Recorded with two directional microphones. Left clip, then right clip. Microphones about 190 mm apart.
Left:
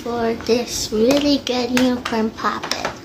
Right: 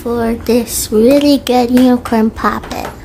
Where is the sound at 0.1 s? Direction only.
55° right (ahead or behind).